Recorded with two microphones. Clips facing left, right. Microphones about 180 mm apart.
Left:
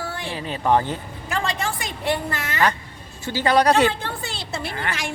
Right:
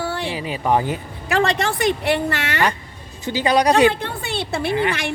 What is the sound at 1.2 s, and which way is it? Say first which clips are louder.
A woman's voice: right 7 dB; 70° right (ahead or behind).